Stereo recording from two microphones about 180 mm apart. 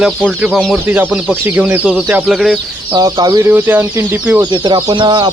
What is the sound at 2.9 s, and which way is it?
Speech, 20° right (ahead or behind).